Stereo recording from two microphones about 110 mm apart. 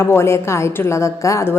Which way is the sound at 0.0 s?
25° left (ahead or behind).